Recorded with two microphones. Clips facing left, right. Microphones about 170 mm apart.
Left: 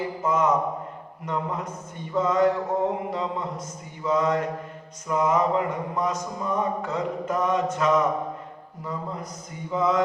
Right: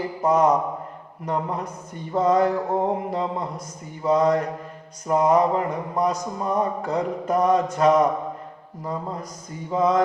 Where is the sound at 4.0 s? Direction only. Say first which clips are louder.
Right 4 dB; 35° right (ahead or behind).